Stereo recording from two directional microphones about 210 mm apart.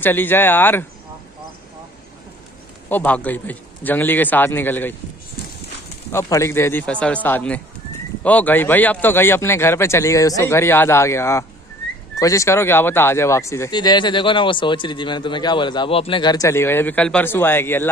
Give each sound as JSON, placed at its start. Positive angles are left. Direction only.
{"t": 0.0, "sound": "speech", "side_deg": 10}
{"t": 2.9, "sound": "speech", "side_deg": 10}
{"t": 6.1, "sound": "speech", "side_deg": 15}